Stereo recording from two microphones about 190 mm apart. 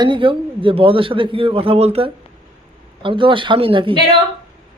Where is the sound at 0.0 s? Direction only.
25° right (ahead or behind).